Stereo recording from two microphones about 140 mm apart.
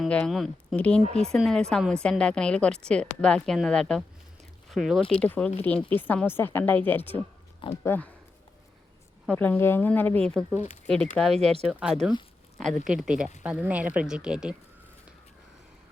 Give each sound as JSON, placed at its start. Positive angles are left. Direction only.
{"t": 0.0, "sound": "speech", "side_deg": 0}
{"t": 9.3, "sound": "speech", "side_deg": 10}
{"t": 11.6, "sound": "a woman's voice", "side_deg": -5}